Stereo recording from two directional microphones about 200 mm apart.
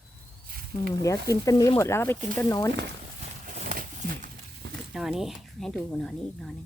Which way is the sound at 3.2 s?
40° right (ahead or behind).